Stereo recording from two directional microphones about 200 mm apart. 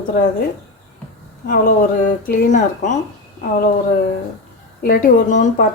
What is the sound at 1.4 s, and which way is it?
Speech, 45° left (ahead or behind).